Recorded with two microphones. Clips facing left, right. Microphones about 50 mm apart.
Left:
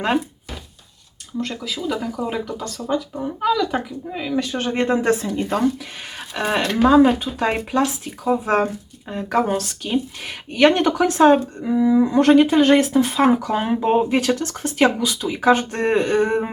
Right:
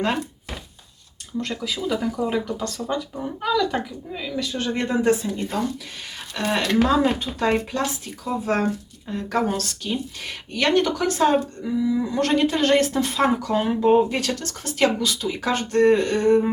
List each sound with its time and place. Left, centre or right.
1.4 s speech: centre
4.1 s speech: left
5.2 s speech: left
6.3 s speech: centre